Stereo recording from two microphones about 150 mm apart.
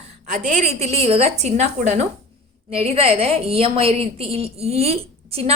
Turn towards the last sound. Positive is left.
turn(degrees=-40)  # may be behind; listen again after turning